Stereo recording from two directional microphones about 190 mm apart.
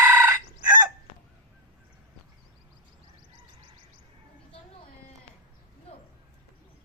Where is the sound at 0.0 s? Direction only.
15° right (ahead or behind).